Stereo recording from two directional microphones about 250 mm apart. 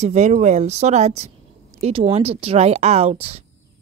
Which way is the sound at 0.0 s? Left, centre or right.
Right.